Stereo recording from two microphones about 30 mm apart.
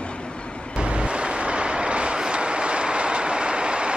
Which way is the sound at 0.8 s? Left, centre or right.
Right.